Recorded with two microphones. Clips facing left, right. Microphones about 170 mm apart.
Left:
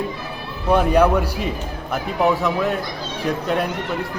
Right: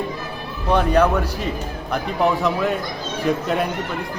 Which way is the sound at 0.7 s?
10° left (ahead or behind).